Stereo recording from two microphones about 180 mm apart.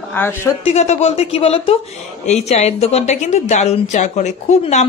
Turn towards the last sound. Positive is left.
turn(degrees=40)  # may be behind; listen again after turning